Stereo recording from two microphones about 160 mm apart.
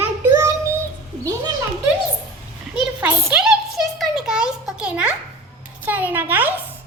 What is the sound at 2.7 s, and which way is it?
Speech, 5° right (ahead or behind).